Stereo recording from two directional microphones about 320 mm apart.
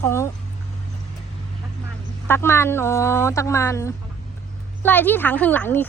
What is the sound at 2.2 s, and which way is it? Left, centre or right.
A woman's voice, centre.